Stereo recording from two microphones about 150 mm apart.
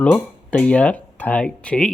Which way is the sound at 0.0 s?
10° left (ahead or behind).